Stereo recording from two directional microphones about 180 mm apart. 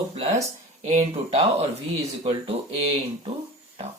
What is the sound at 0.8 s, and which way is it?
Speech, 40° right (ahead or behind).